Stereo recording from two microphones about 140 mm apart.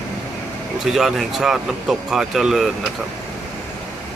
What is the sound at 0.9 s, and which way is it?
Speech, centre (ahead or behind).